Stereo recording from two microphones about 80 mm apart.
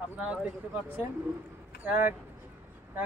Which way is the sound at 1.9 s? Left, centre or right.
Right.